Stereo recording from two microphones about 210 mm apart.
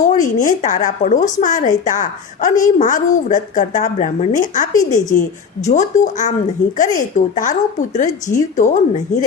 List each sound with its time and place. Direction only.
0.0 s a woman's voice: 35° left (ahead or behind)